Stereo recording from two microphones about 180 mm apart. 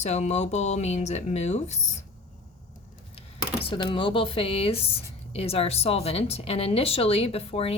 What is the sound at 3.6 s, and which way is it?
Speech, 30° left (ahead or behind).